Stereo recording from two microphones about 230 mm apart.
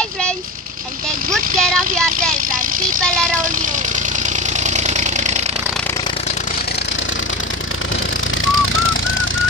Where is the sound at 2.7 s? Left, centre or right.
Right.